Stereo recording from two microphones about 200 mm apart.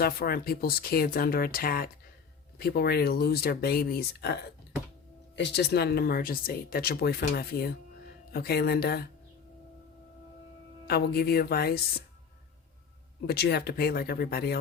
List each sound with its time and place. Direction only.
0.0 s speech: 50° left (ahead or behind)
5.4 s speech: 55° left (ahead or behind)
10.8 s speech: 50° left (ahead or behind)
13.2 s speech: 55° left (ahead or behind)